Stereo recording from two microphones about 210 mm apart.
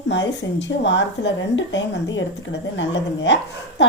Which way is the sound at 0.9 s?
60° left (ahead or behind).